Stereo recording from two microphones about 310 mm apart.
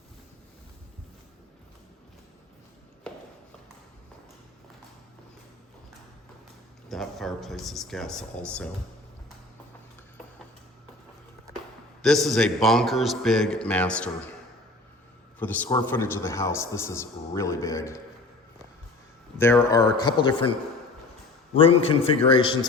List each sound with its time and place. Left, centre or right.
3.1 s a sound: centre
6.8 s speech: centre
12.0 s speech: centre
15.4 s a man's voice: centre
19.4 s a man's voice: centre
21.6 s a man's voice: centre